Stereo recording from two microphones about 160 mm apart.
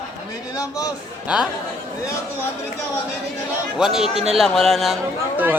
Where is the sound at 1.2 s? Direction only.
5° right (ahead or behind).